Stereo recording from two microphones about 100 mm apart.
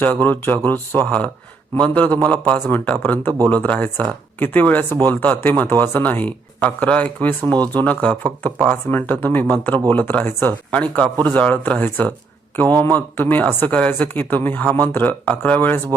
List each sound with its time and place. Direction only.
0.0 s speech: 15° left (ahead or behind)